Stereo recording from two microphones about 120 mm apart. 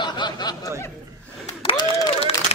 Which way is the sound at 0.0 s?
40° left (ahead or behind).